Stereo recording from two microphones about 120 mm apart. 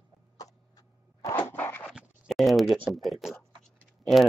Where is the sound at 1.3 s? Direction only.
15° left (ahead or behind).